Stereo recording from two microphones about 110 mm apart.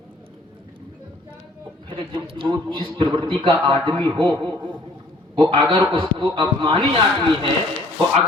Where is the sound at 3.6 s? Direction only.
50° right (ahead or behind).